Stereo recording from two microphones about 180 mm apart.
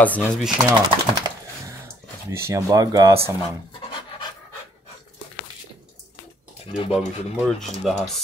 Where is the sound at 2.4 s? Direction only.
20° right (ahead or behind).